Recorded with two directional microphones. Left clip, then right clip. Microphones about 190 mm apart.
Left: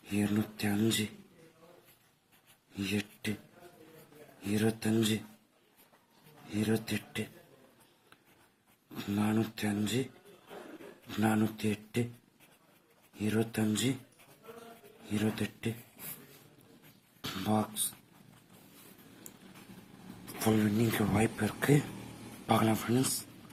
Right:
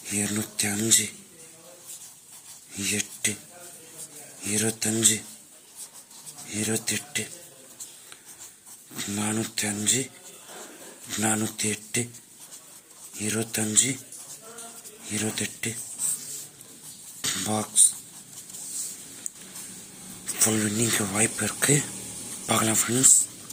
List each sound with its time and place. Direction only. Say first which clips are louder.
0.0 s speech: right 4 dB; 10° right (ahead or behind)
2.7 s speech: right 7 dB; 10° right (ahead or behind)
4.4 s speech: right 4 dB; 10° right (ahead or behind)
6.5 s speech: right 5 dB; 10° right (ahead or behind)
9.0 s speech: right 3 dB; 5° right (ahead or behind)
11.1 s speech: right 4 dB; 10° right (ahead or behind)
13.1 s speech: right 4 dB; 5° right (ahead or behind)
15.0 s speech: right 5 dB; 5° right (ahead or behind)
17.2 s a sound: right 5 dB; 10° right (ahead or behind)
19.3 s a sound: right 16 dB; 10° left (ahead or behind)
20.3 s speech: right 5 dB; 5° right (ahead or behind)